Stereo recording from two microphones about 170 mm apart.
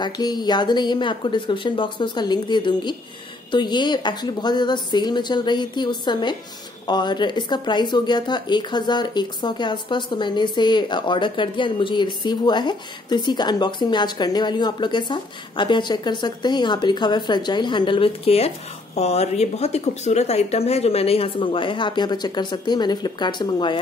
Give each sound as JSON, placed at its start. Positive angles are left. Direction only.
{"t": 0.0, "sound": "speech", "side_deg": 25}